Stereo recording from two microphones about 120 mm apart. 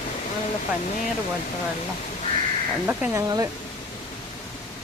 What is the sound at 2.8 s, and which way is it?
Speech, 15° right (ahead or behind).